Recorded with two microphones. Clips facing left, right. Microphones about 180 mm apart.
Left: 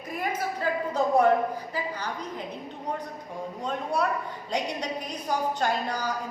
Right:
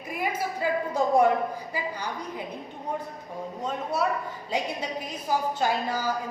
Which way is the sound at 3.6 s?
5° right (ahead or behind).